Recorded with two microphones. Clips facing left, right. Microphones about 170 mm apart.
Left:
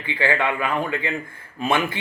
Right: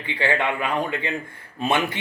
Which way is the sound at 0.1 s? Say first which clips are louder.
Left 1 dB; 25° right (ahead or behind).